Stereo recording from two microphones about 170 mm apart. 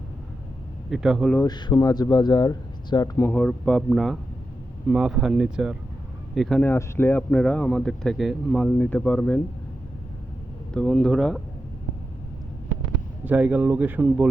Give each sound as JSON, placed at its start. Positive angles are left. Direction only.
{"t": 0.9, "sound": "speech", "side_deg": -5}
{"t": 1.4, "sound": "speech", "side_deg": 25}
{"t": 10.8, "sound": "speech", "side_deg": 5}
{"t": 13.2, "sound": "speech", "side_deg": -10}